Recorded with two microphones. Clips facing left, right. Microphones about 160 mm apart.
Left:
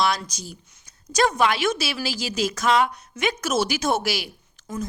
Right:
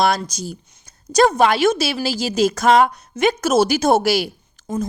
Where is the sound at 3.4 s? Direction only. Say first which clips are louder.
Right 7 dB; 35° right (ahead or behind).